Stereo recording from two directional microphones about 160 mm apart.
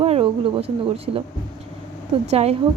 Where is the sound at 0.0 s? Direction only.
35° right (ahead or behind).